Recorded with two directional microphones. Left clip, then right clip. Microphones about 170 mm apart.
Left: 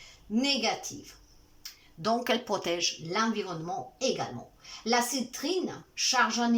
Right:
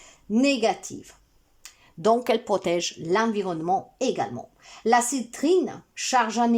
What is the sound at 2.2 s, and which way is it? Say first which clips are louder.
A man's voice: right 6 dB; 25° right (ahead or behind).